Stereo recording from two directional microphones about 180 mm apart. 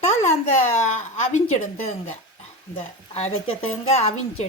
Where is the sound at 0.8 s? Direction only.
40° left (ahead or behind).